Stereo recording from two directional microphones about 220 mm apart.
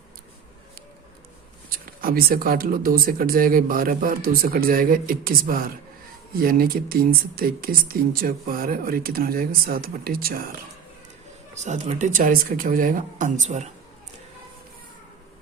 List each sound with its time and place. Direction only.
1.7 s speech: 40° right (ahead or behind)
11.5 s speech: 30° right (ahead or behind)